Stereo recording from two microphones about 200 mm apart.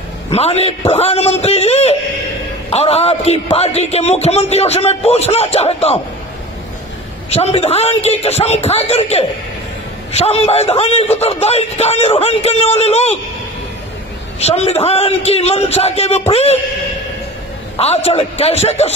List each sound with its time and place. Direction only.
0.3 s a man's voice: 30° left (ahead or behind)
7.2 s a man's voice: 30° left (ahead or behind)
14.4 s a man's voice: 30° left (ahead or behind)
17.7 s a man's voice: 30° left (ahead or behind)